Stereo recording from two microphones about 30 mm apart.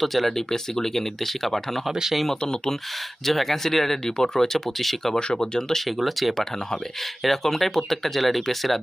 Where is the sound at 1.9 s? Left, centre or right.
Centre.